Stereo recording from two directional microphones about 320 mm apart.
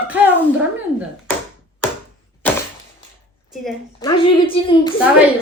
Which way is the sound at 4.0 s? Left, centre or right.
Centre.